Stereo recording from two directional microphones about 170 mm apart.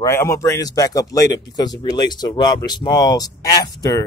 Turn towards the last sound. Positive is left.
turn(degrees=20)  # may be behind; listen again after turning